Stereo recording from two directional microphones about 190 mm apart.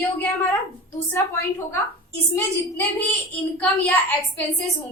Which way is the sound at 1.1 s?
10° left (ahead or behind).